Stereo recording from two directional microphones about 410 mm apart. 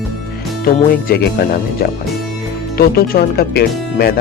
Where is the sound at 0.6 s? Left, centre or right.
Left.